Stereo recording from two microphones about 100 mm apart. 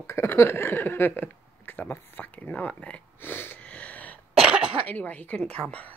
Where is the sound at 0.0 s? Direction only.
25° left (ahead or behind).